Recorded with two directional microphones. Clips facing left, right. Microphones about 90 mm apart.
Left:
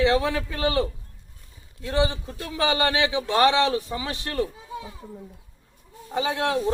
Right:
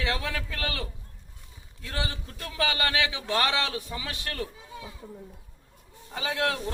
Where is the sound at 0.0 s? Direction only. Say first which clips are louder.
Left 10 dB; 25° left (ahead or behind).